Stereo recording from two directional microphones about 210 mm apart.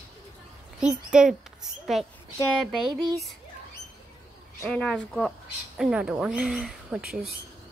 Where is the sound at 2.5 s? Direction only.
Centre (ahead or behind).